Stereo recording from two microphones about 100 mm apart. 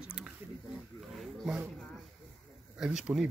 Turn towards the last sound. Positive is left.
turn(degrees=-10)  # may be behind; listen again after turning